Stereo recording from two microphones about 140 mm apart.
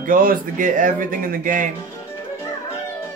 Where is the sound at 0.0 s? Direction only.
85° right.